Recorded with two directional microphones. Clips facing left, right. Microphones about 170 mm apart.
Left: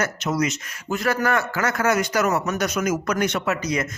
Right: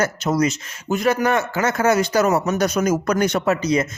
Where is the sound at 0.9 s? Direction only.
20° right (ahead or behind).